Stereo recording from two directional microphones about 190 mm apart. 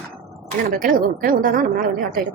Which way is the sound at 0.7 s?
45° right (ahead or behind).